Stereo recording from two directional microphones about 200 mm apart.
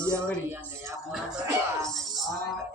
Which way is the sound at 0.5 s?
15° right (ahead or behind).